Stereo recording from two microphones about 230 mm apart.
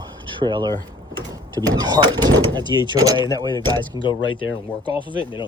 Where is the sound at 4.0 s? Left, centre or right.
Left.